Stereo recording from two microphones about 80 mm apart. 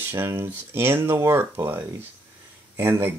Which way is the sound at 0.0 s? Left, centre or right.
Right.